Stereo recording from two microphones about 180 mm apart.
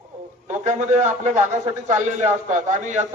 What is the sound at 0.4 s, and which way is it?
A man's voice, 40° right (ahead or behind).